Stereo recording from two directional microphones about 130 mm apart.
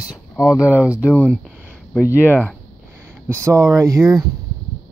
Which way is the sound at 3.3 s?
25° right (ahead or behind).